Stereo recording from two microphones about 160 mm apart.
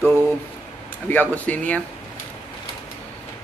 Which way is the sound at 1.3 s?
10° left (ahead or behind).